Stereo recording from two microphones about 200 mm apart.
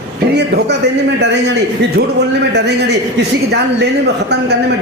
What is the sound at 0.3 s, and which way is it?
A woman's voice, 60° right (ahead or behind).